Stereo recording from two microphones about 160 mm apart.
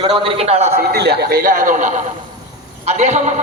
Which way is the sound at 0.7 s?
85° right.